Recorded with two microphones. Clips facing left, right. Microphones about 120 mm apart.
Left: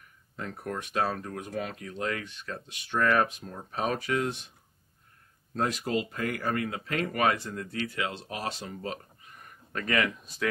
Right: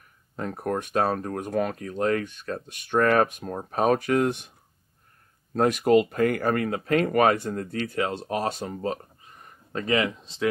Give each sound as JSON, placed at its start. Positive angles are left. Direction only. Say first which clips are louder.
{"t": 0.4, "sound": "speech", "louder": "right 7 dB", "side_deg": -45}
{"t": 5.5, "sound": "speech", "louder": "right 10 dB", "side_deg": -55}